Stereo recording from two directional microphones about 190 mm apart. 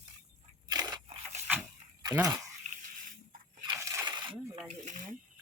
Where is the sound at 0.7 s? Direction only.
20° right (ahead or behind).